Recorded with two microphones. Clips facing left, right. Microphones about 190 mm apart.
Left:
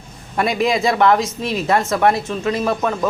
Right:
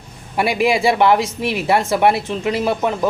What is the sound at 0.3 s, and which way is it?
A man's voice, 10° right (ahead or behind).